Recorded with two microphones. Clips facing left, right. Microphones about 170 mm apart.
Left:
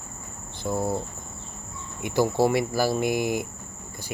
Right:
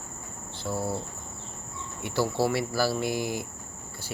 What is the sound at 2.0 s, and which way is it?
Cricket, 15° left (ahead or behind).